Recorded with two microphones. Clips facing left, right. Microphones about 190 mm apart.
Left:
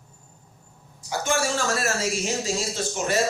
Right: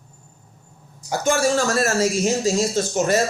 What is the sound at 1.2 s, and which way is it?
Speech, 40° right (ahead or behind).